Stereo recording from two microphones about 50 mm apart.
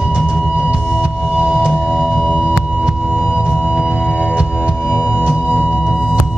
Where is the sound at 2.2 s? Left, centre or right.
Right.